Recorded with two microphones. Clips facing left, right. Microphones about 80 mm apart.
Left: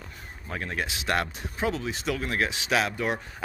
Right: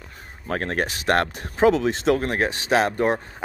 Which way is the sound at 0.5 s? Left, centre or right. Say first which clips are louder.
Right 7 dB; right.